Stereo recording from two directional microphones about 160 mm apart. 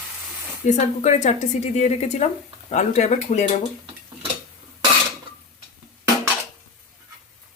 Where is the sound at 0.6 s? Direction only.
50° left (ahead or behind).